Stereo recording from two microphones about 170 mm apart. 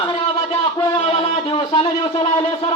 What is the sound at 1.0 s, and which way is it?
Speech, 35° left (ahead or behind).